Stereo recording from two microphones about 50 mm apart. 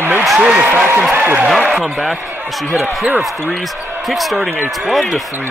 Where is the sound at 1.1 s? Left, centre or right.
Right.